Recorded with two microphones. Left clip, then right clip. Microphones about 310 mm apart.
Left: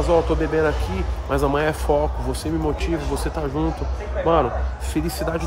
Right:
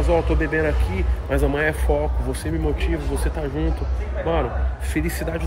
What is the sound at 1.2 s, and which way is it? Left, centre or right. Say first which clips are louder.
Speech: left 1 dB; centre.